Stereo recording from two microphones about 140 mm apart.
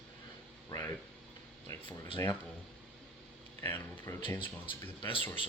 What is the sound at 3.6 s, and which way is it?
Speech, 15° left (ahead or behind).